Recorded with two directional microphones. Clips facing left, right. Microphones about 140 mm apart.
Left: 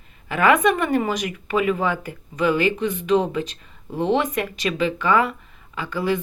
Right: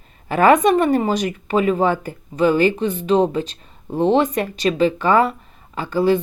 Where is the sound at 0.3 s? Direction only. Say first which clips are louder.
Right 4 dB; 40° right (ahead or behind).